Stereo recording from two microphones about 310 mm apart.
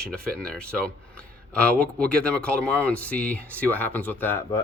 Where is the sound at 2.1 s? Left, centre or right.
Centre.